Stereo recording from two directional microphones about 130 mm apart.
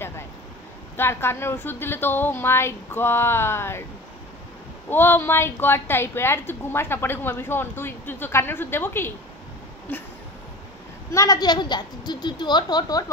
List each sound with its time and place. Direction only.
0.9 s a woman's voice: 15° left (ahead or behind)
4.8 s a woman's voice: 15° left (ahead or behind)
11.1 s speech: 25° left (ahead or behind)